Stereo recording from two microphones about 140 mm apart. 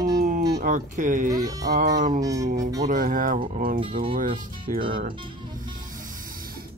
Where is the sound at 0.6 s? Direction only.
70° right (ahead or behind).